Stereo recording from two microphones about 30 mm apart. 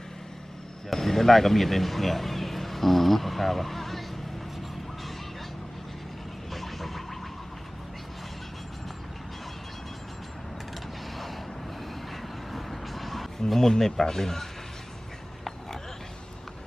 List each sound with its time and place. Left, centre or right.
0.9 s speech: centre
6.5 s music: centre
12.1 s vehicle: centre
13.5 s speech: centre